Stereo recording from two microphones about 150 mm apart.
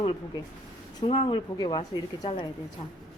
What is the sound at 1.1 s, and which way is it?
Speech, 35° left (ahead or behind).